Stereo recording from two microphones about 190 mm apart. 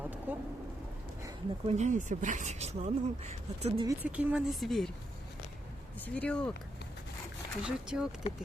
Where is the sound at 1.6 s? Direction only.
35° right (ahead or behind).